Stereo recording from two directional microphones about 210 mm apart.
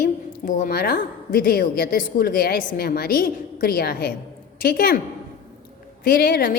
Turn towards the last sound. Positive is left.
turn(degrees=45)  # may be behind; listen again after turning